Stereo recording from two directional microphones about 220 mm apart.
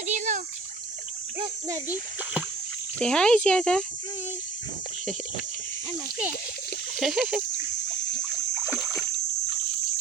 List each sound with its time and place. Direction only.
0.1 s a sound: 35° right (ahead or behind)
1.4 s a child's voice: 15° right (ahead or behind)
3.0 s speech: 5° left (ahead or behind)
7.0 s speech: centre (ahead or behind)